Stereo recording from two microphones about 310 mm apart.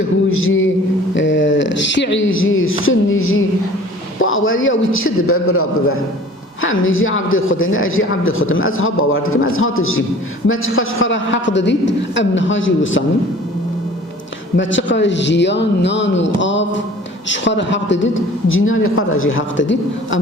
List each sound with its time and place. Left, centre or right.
0.4 s a woman's voice: left
14.5 s a woman's voice: left